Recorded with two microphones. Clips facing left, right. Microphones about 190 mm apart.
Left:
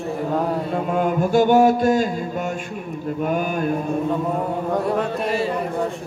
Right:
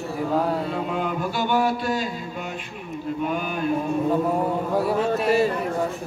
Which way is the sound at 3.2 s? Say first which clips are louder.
Left 5 dB; 45° left (ahead or behind).